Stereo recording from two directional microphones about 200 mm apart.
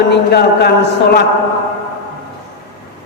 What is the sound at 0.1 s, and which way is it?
Speech, 55° left (ahead or behind).